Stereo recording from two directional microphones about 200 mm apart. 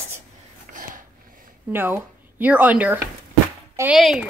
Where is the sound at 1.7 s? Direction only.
10° right (ahead or behind).